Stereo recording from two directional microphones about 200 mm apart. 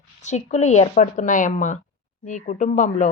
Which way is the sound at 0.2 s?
35° left (ahead or behind).